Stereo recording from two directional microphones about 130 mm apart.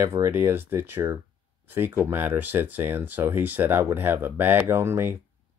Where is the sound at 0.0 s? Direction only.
20° right (ahead or behind).